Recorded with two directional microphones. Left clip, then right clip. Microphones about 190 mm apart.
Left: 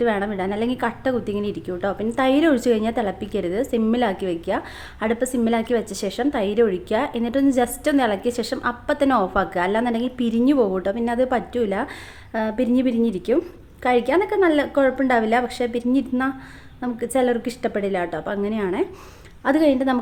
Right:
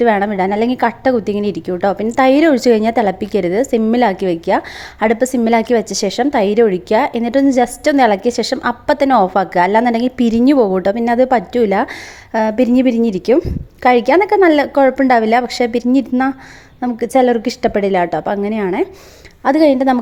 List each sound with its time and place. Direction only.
0.0 s a woman's voice: 35° right (ahead or behind)